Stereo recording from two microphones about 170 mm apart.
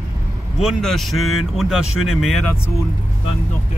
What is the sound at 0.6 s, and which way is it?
Speech, centre (ahead or behind).